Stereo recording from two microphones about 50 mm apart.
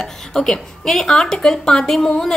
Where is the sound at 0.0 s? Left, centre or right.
Centre.